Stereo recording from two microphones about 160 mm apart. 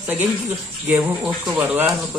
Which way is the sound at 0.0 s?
10° right (ahead or behind).